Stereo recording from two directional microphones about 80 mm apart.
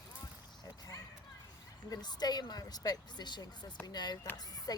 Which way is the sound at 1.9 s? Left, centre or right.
Left.